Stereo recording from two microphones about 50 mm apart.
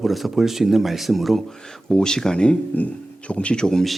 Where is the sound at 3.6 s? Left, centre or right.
Centre.